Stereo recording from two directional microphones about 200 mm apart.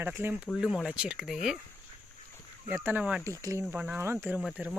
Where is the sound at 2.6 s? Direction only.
10° right (ahead or behind).